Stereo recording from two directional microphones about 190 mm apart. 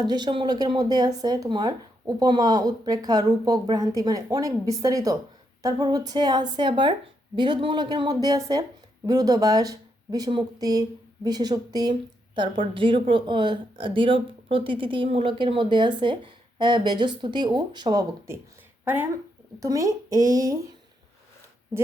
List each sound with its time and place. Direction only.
0.0 s speech: 20° right (ahead or behind)
19.5 s speech: 15° right (ahead or behind)